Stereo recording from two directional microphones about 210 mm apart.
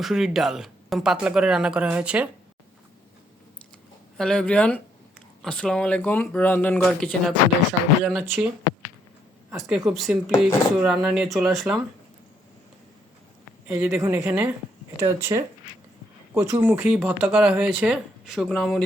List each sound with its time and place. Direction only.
0.0 s speech: centre (ahead or behind)
4.2 s speech: 5° left (ahead or behind)
13.7 s speech: 5° right (ahead or behind)
14.9 s speech: 15° right (ahead or behind); by 18.8 s centre (ahead or behind)